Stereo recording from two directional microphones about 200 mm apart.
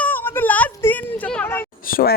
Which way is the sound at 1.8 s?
45° left (ahead or behind).